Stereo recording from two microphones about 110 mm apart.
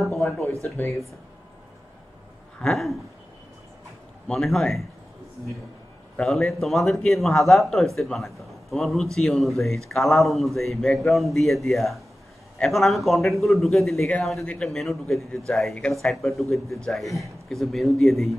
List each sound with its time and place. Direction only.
0.7 s speech: 25° left (ahead or behind)
2.6 s speech: centre (ahead or behind)
4.3 s speech: 5° left (ahead or behind)
6.1 s speech: 5° left (ahead or behind)